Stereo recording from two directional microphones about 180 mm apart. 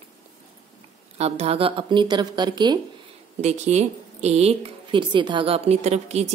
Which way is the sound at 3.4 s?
40° right (ahead or behind).